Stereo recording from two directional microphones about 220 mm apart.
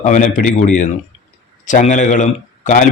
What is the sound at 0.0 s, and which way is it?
Speech, 35° left (ahead or behind).